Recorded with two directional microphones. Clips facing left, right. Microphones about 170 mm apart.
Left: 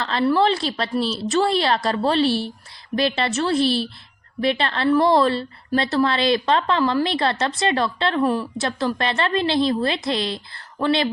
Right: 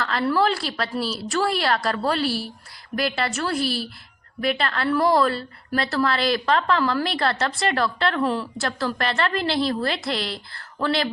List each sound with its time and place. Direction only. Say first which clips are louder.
0.0 s a woman's voice: left 3 dB; 20° left (ahead or behind)